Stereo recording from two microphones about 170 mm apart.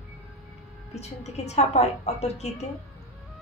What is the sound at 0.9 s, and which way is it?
A woman's voice, 40° left (ahead or behind).